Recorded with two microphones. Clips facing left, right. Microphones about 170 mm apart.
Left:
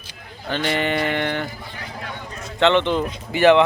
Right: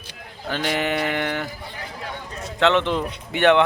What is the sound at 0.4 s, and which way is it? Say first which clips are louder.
Speech: left 1 dB; 5° right (ahead or behind).